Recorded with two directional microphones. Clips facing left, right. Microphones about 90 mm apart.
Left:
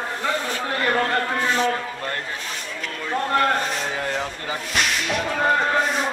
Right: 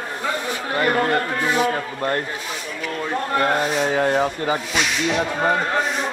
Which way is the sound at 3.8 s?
30° right (ahead or behind).